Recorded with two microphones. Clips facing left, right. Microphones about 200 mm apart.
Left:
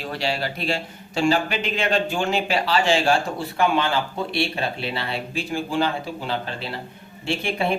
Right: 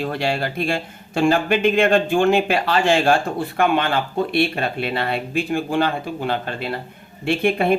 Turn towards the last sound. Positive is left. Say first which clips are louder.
# right 6 dB
turn(degrees=-55)  # may be behind; listen again after turning